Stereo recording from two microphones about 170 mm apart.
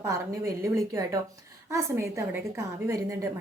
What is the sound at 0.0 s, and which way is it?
A woman's voice, 20° right (ahead or behind).